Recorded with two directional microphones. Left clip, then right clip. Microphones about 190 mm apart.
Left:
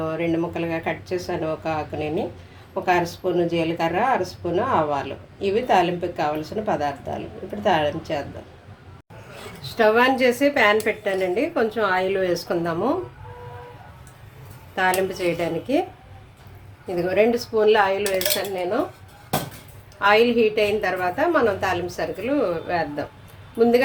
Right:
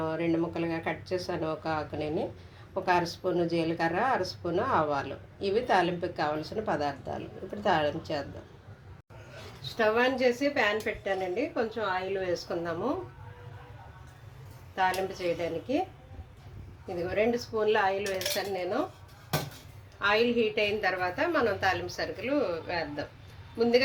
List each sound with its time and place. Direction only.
0.0 s a woman's voice: centre (ahead or behind)
9.7 s a woman's voice: 15° left (ahead or behind)
14.8 s a woman's voice: 20° left (ahead or behind)
17.1 s a woman's voice: 15° left (ahead or behind)
20.0 s a woman's voice: 10° left (ahead or behind)